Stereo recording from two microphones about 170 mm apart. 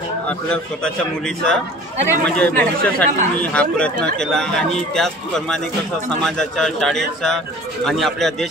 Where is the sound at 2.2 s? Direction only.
5° left (ahead or behind).